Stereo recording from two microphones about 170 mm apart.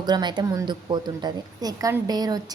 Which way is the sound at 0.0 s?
25° right (ahead or behind).